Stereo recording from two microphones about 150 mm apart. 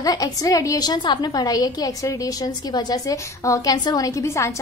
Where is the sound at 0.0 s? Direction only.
25° left (ahead or behind).